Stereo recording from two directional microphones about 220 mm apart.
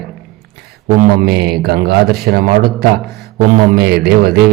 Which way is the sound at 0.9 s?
40° right (ahead or behind).